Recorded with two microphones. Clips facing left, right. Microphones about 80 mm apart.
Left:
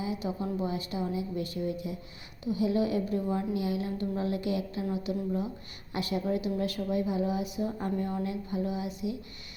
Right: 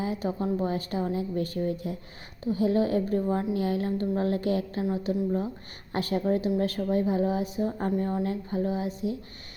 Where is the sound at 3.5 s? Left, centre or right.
Right.